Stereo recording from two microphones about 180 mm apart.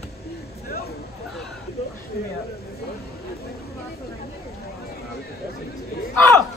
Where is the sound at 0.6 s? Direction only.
60° left (ahead or behind).